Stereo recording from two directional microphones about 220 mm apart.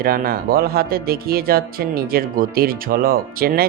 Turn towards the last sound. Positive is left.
turn(degrees=-40)  # may be behind; listen again after turning